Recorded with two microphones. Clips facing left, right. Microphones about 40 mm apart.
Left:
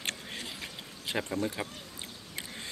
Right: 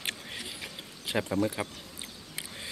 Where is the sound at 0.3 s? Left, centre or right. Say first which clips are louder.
Even; centre.